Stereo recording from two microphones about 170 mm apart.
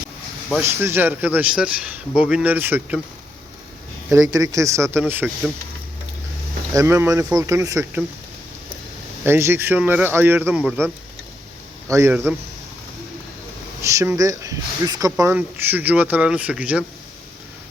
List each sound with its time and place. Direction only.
0.6 s speech: 15° right (ahead or behind)
4.3 s speech: 20° right (ahead or behind)
6.7 s speech: 15° right (ahead or behind)
9.2 s speech: 15° right (ahead or behind)
11.9 s speech: 15° right (ahead or behind)
13.8 s speech: 15° right (ahead or behind)